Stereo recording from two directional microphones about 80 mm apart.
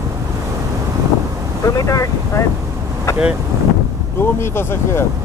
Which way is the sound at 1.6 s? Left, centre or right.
Left.